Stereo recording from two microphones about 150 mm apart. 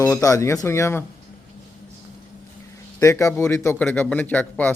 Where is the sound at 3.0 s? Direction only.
20° left (ahead or behind).